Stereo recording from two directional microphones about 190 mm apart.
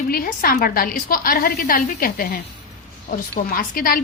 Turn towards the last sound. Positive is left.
turn(degrees=50)  # may be behind; listen again after turning